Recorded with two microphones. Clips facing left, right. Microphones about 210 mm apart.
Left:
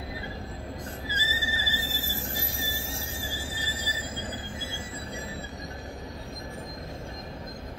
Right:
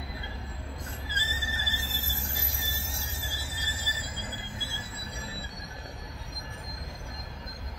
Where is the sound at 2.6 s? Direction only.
90° left.